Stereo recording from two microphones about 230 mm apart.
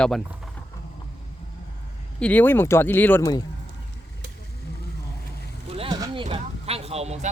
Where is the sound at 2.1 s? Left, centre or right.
Centre.